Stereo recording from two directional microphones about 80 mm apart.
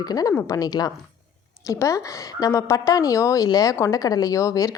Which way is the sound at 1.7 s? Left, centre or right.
Left.